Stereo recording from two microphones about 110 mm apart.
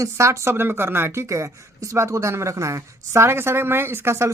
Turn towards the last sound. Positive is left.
turn(degrees=-25)  # may be behind; listen again after turning